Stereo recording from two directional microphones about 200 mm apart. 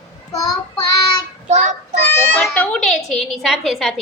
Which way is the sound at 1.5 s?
35° right (ahead or behind).